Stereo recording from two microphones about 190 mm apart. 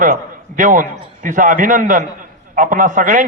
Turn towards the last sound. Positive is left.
turn(degrees=-45)  # may be behind; listen again after turning